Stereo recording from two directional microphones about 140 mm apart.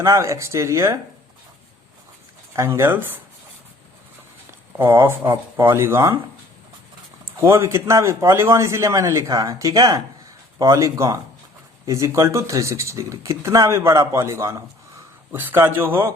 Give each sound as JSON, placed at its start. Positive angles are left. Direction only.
{"t": 0.0, "sound": "speech", "side_deg": -20}
{"t": 2.5, "sound": "speech", "side_deg": -20}
{"t": 5.0, "sound": "speech", "side_deg": -15}
{"t": 7.3, "sound": "speech", "side_deg": -20}